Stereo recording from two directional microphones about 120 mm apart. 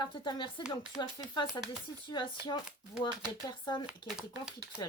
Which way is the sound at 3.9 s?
5° right (ahead or behind).